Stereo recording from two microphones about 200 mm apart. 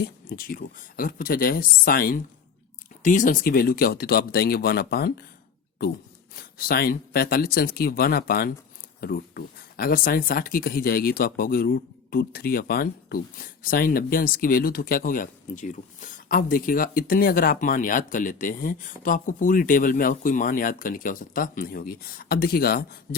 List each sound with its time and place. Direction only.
0.0 s speech: 45° left (ahead or behind)
6.3 s speech: 50° left (ahead or behind)